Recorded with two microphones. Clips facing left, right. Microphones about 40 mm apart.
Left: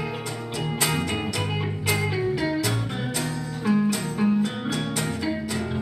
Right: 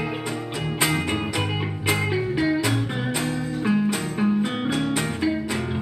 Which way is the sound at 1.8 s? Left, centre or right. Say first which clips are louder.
Right 2 dB; right.